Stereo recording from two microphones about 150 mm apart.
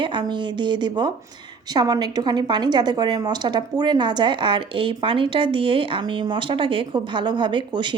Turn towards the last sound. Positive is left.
turn(degrees=-30)  # may be behind; listen again after turning